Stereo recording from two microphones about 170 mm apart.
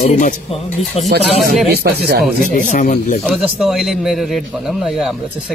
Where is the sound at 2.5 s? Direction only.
50° left (ahead or behind).